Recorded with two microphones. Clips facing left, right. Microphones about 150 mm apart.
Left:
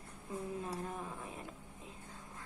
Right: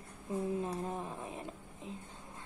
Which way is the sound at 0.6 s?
25° right (ahead or behind).